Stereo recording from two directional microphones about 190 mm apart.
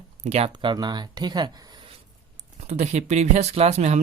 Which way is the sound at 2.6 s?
35° right (ahead or behind).